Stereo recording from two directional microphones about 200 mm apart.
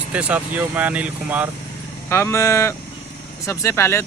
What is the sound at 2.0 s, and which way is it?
Speech, 15° left (ahead or behind).